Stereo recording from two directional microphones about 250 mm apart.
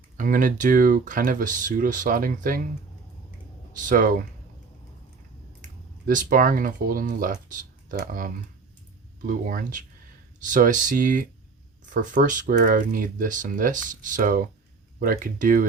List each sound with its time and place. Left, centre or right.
0.2 s speech: right
3.8 s speech: right
6.1 s speech: right